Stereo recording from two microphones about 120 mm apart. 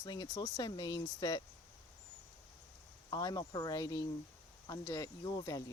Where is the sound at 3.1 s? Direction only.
35° left (ahead or behind).